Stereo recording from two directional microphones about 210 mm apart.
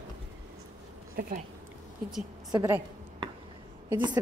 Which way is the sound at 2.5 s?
15° right (ahead or behind).